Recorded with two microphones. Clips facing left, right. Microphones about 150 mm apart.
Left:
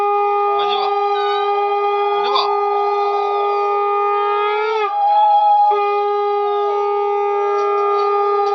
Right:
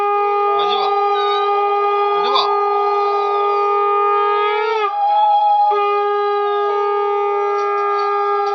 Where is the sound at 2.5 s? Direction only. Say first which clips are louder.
Even; 30° left (ahead or behind).